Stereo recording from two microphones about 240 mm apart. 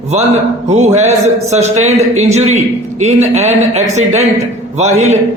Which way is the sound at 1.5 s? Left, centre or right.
Right.